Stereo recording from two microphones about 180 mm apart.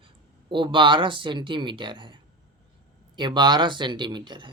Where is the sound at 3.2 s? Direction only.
25° right (ahead or behind).